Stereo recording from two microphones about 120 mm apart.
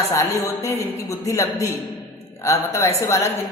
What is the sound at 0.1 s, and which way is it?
A woman's voice, 25° left (ahead or behind).